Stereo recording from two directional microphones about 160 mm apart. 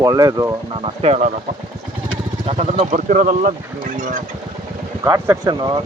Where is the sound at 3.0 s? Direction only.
55° right (ahead or behind).